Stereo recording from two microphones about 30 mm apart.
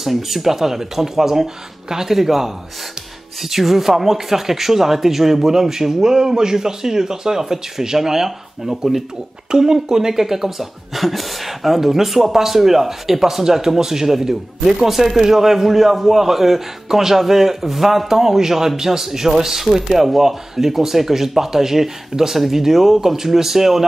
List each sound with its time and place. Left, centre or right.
0.0 s speech: centre
9.5 s speech: right